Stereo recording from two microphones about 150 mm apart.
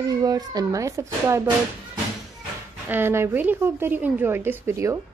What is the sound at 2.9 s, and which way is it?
A woman's voice, 15° right (ahead or behind).